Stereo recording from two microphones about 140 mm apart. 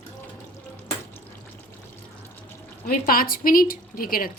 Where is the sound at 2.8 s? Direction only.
90° left.